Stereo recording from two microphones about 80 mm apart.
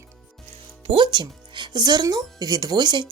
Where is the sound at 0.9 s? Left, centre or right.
Right.